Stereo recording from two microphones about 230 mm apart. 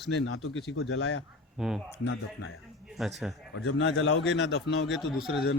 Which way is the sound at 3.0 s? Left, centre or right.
Centre.